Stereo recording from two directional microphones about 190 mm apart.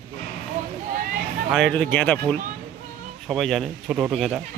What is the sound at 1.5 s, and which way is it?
Speech, 5° left (ahead or behind).